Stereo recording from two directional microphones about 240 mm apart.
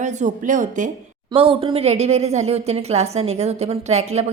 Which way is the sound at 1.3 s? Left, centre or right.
Right.